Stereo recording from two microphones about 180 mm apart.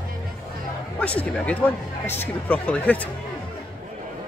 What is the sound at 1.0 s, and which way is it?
Speech, 5° left (ahead or behind).